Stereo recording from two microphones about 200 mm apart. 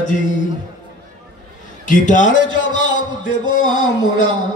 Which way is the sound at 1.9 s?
40° left (ahead or behind).